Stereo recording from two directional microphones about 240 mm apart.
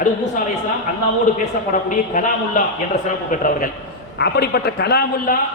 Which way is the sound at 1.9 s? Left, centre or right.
Left.